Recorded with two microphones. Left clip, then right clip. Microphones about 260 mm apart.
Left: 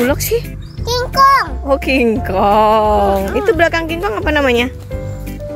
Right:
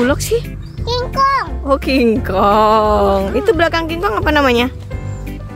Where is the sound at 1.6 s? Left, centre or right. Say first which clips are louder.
Even; centre.